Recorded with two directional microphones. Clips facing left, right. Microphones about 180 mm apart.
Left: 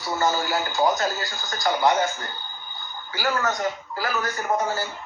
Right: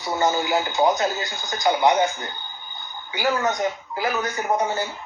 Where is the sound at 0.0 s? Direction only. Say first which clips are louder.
Right 2 dB; 20° right (ahead or behind).